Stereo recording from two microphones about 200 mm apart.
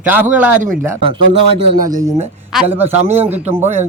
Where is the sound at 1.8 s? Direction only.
40° right (ahead or behind).